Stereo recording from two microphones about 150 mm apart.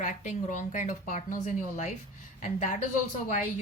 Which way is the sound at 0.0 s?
55° left (ahead or behind).